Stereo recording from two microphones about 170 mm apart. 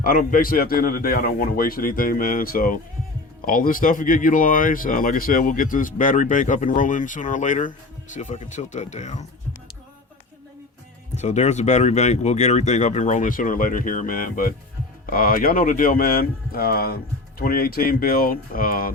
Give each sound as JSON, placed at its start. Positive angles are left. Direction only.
{"t": 0.0, "sound": "speech", "side_deg": 55}
{"t": 11.1, "sound": "speech", "side_deg": 45}